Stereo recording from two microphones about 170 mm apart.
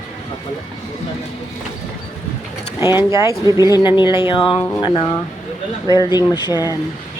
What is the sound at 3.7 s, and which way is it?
Speech, 25° left (ahead or behind).